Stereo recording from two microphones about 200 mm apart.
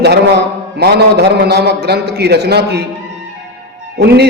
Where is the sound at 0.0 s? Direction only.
55° right (ahead or behind).